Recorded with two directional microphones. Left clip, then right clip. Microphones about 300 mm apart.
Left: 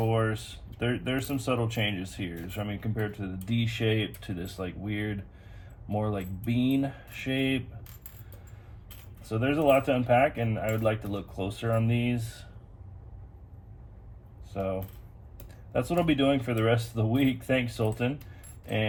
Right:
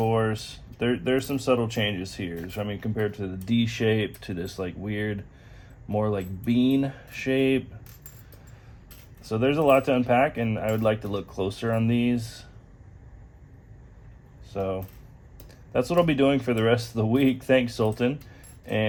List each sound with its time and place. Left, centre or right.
0.0 s typing: right
0.8 s speech: right
9.3 s speech: right
14.5 s speech: right